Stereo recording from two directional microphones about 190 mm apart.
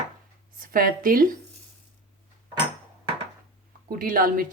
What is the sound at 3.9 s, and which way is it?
Speech, 50° right (ahead or behind).